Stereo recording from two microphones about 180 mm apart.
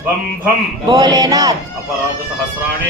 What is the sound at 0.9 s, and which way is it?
Speech, 20° right (ahead or behind).